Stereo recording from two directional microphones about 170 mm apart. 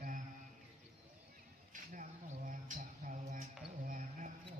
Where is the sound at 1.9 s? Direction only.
50° right (ahead or behind).